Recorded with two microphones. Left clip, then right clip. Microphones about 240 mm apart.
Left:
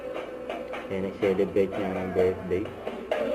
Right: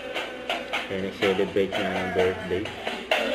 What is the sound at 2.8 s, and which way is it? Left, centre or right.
Music, centre.